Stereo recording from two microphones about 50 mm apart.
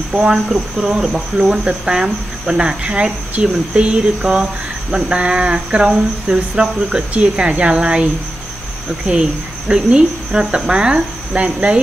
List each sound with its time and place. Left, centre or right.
0.1 s speech: centre